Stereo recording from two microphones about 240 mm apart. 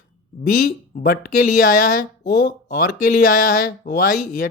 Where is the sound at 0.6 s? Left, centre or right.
Left.